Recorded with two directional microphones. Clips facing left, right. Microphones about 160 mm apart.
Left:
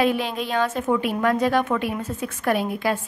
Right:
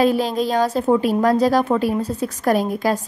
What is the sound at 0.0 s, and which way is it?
A woman's voice, 40° right (ahead or behind).